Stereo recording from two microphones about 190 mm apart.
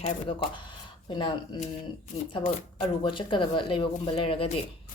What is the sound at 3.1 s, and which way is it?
Speech, 25° left (ahead or behind).